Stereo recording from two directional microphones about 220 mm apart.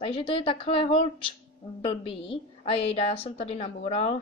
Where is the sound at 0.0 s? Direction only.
25° left (ahead or behind).